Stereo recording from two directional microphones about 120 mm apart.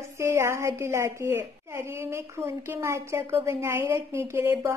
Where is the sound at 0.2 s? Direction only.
20° right (ahead or behind).